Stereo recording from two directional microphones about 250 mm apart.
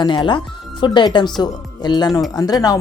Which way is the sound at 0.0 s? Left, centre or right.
Centre.